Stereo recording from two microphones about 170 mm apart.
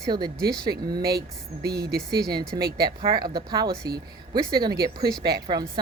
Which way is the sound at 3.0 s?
25° right (ahead or behind).